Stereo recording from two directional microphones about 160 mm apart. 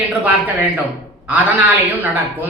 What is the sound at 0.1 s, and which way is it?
Speech, 10° right (ahead or behind).